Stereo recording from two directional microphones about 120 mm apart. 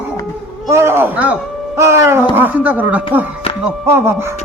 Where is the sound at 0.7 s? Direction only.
20° right (ahead or behind).